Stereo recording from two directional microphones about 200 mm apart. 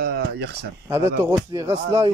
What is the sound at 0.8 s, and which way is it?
Speech, 15° right (ahead or behind).